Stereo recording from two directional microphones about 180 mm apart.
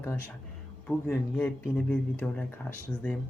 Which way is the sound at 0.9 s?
10° left (ahead or behind).